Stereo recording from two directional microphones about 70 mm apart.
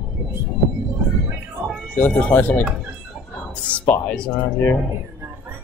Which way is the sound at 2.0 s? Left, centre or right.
Left.